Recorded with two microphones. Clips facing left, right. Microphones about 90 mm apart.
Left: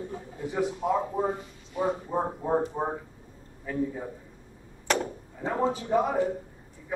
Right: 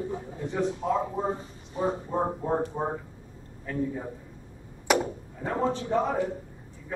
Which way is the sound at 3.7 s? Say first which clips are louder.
Left 1 dB; 5° left (ahead or behind).